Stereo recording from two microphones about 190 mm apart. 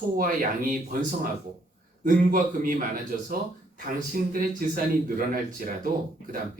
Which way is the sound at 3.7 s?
45° right (ahead or behind).